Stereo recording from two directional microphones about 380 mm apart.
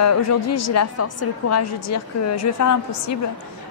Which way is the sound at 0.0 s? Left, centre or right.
Left.